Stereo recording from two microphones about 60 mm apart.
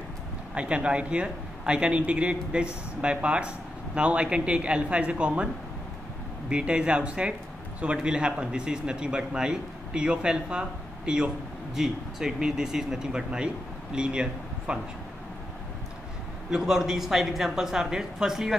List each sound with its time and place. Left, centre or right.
0.6 s speech: centre
6.5 s a man's voice: centre
16.4 s a man's voice: centre